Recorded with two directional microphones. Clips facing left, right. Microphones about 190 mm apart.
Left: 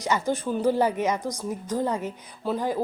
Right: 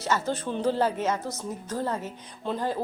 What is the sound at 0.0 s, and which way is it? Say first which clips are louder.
Speech: left 2 dB; 15° left (ahead or behind).